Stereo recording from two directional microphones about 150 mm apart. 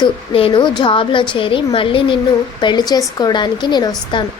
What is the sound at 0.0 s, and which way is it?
A woman's voice, 35° left (ahead or behind).